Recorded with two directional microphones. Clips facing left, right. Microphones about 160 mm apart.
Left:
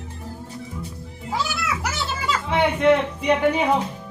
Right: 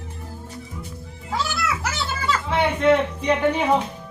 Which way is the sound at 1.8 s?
15° left (ahead or behind).